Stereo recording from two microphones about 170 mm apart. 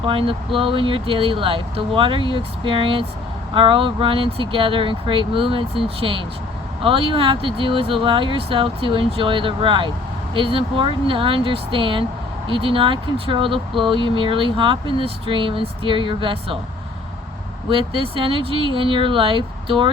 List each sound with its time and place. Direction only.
0.0 s speech: 30° right (ahead or behind)
17.7 s speech: 30° right (ahead or behind)